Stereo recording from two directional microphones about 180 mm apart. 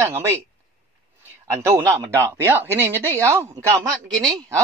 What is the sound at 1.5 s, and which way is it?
Speech, 15° right (ahead or behind).